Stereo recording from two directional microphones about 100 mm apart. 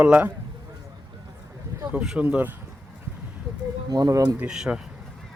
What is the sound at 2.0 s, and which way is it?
Speech, 5° right (ahead or behind).